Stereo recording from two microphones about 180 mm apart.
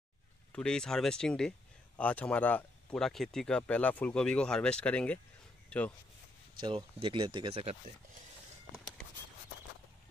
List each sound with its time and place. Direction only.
0.5 s speech: 5° left (ahead or behind)
6.6 s speech: 30° right (ahead or behind)
8.7 s a sound: centre (ahead or behind)